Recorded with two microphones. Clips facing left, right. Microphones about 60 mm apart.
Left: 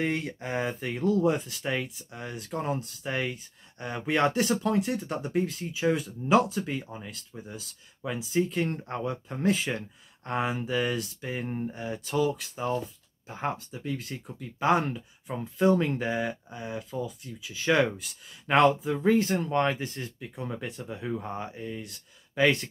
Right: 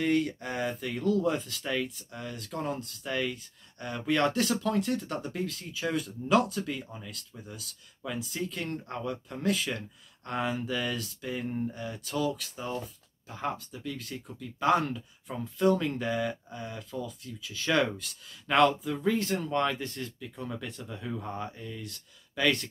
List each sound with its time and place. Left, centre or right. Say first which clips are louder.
0.0 s speech: right 2 dB; left
21.6 s speech: left 3 dB; left